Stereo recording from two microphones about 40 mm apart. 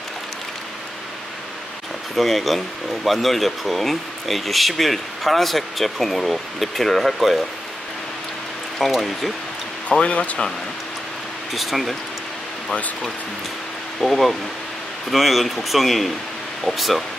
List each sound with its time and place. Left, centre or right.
2.1 s speech: centre
8.7 s speech: centre
10.0 s speech: left
11.5 s speech: centre
14.0 s speech: centre